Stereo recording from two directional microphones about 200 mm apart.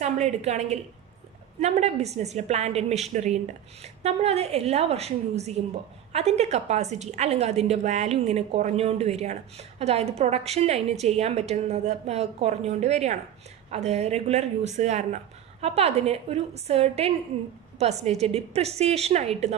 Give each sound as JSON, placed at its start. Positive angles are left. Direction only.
{"t": 0.0, "sound": "a woman's voice", "side_deg": -35}